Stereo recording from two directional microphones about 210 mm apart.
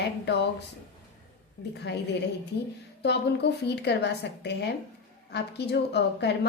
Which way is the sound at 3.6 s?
55° left (ahead or behind).